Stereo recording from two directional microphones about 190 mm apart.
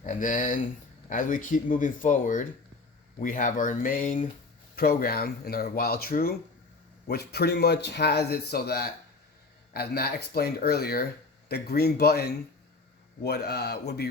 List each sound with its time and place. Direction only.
0.0 s speech: 45° left (ahead or behind)